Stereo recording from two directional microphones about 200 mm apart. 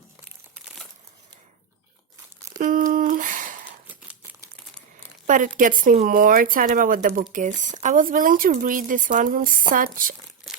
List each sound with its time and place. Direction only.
2.6 s a sound: 40° right (ahead or behind)
3.8 s crumpling: 10° right (ahead or behind)
5.2 s speech: 40° right (ahead or behind)
10.5 s crumpling: centre (ahead or behind)